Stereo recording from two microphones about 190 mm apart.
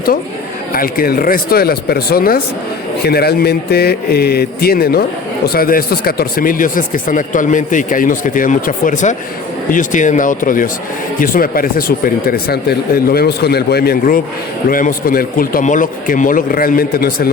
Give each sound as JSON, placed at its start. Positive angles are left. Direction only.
{"t": 0.7, "sound": "speech", "side_deg": 50}
{"t": 14.7, "sound": "speech", "side_deg": 45}